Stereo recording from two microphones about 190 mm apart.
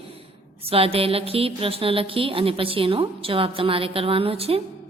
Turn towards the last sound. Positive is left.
turn(degrees=-30)  # may be behind; listen again after turning